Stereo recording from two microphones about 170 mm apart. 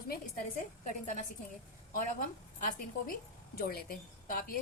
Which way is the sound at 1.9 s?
55° left (ahead or behind).